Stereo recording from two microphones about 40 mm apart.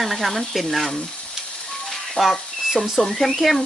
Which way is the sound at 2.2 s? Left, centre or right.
Left.